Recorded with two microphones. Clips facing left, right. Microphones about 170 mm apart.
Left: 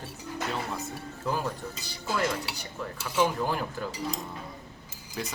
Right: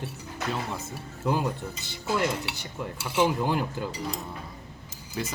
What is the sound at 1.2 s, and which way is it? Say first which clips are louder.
Cutlery: right 4 dB; 20° right (ahead or behind).